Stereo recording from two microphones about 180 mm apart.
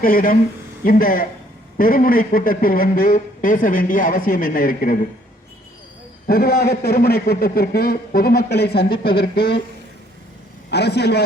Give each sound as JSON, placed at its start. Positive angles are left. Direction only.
{"t": 0.0, "sound": "speech", "side_deg": 55}
{"t": 6.2, "sound": "a man's voice", "side_deg": 55}
{"t": 10.7, "sound": "a man's voice", "side_deg": 65}